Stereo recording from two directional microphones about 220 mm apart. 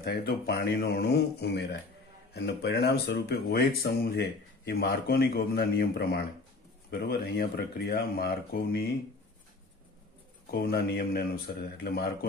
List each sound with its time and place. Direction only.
0.0 s speech: 45° left (ahead or behind)
10.4 s speech: 45° left (ahead or behind)